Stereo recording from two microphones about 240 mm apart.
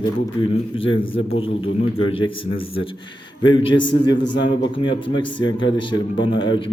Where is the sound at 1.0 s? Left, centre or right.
Left.